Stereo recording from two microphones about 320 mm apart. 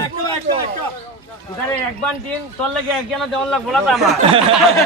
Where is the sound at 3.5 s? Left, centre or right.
Centre.